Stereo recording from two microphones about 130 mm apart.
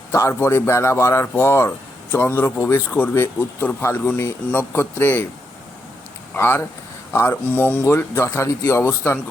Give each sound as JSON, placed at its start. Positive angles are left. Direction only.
{"t": 0.1, "sound": "speech", "side_deg": 20}
{"t": 6.3, "sound": "speech", "side_deg": 15}